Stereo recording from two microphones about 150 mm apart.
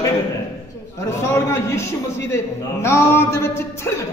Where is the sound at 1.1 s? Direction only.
20° left (ahead or behind).